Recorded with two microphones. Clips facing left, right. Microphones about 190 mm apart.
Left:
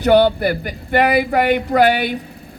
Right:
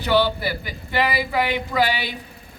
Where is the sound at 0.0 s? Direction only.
55° left (ahead or behind).